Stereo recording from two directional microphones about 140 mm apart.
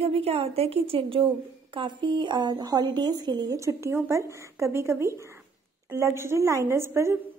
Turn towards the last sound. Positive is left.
turn(degrees=-20)  # may be behind; listen again after turning